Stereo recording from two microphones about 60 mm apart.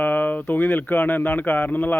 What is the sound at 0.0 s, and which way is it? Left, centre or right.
Speech, left.